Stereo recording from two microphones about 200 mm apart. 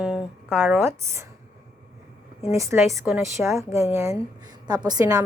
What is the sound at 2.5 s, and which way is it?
A woman's voice, 15° right (ahead or behind).